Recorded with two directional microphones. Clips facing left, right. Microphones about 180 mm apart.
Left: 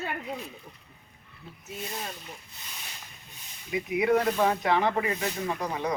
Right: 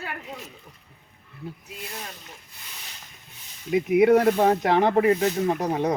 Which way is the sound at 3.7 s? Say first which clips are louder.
Right 7 dB; 50° right (ahead or behind).